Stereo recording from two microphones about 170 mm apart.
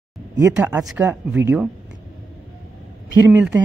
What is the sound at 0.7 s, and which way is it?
Speech, 15° right (ahead or behind).